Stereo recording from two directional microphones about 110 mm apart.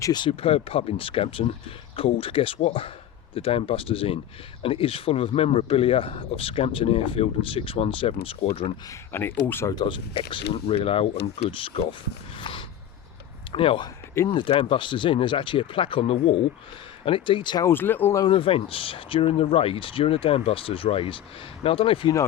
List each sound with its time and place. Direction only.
0.0 s speech: 40° left (ahead or behind)
0.3 s speech: 60° left (ahead or behind)
9.1 s speech: 20° left (ahead or behind)
9.8 s speech: 55° left (ahead or behind)
12.4 s a sound: 50° left (ahead or behind)
13.5 s speech: 55° left (ahead or behind)
14.5 s speech: 60° left (ahead or behind)
17.1 s speech: 50° left (ahead or behind)
17.7 s speech: 20° left (ahead or behind)
18.3 s speech: 55° left (ahead or behind)